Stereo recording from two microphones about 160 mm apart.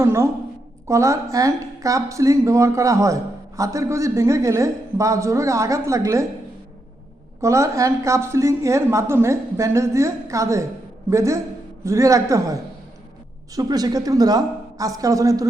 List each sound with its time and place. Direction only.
0.0 s a woman's voice: 15° right (ahead or behind)
7.4 s a woman's voice: 20° right (ahead or behind)
13.6 s a woman's voice: 25° right (ahead or behind)